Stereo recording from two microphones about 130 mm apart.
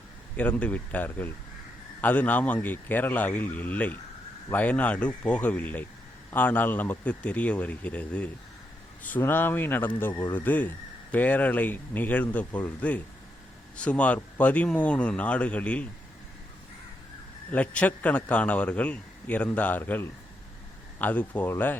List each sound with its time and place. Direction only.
0.3 s a man's voice: 10° left (ahead or behind)
17.5 s a man's voice: 10° left (ahead or behind)